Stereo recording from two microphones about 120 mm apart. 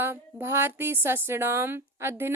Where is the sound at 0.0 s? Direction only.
20° right (ahead or behind).